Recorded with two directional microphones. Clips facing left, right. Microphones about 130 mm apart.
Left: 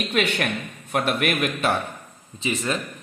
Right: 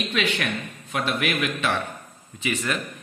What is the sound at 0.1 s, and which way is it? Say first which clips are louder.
Speech: left 4 dB; 55° left (ahead or behind).